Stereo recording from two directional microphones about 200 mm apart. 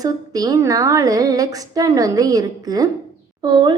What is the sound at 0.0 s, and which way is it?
A woman's voice, 20° right (ahead or behind).